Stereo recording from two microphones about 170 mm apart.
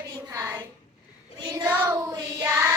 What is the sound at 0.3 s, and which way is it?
Child singing, 15° right (ahead or behind).